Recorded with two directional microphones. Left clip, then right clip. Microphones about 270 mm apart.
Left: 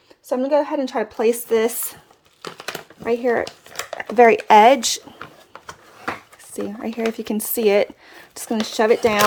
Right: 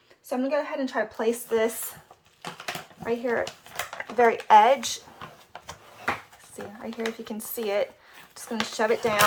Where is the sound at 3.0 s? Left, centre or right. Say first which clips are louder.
Left 7 dB; left.